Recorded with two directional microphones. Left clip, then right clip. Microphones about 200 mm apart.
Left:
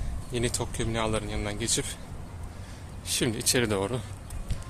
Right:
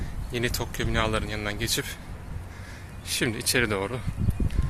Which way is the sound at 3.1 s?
15° left (ahead or behind).